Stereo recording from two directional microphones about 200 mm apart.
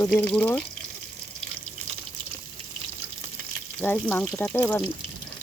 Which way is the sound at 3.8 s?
10° left (ahead or behind).